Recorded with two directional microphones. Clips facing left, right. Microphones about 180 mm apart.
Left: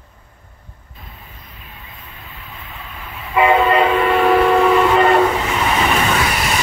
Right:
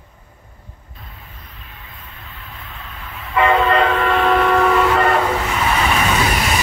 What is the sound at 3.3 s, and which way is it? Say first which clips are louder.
Train: left 2 dB; 10° left (ahead or behind).